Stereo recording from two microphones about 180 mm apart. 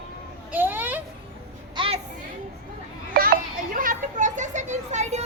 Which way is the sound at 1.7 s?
30° right (ahead or behind).